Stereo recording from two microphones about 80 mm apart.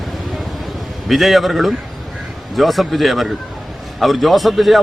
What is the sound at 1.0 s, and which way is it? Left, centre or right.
A man's voice, centre.